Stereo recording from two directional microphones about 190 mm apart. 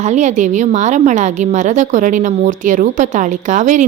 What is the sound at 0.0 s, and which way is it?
A woman's voice, 40° right (ahead or behind).